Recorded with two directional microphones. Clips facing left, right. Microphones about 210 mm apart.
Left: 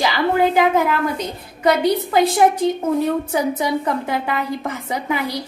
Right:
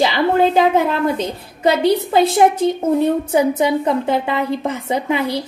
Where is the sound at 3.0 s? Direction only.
25° right (ahead or behind).